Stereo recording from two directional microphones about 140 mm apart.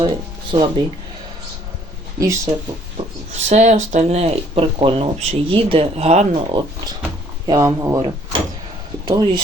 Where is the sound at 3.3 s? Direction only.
55° right (ahead or behind).